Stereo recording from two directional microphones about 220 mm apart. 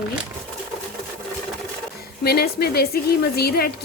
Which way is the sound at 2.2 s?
45° left (ahead or behind).